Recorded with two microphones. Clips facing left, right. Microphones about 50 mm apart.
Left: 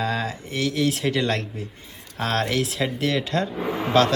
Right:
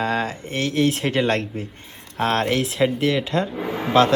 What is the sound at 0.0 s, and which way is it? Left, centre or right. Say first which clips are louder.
A man's voice: right 3 dB; right.